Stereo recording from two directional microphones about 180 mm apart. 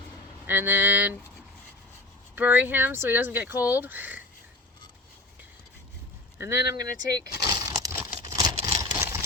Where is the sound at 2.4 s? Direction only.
10° right (ahead or behind).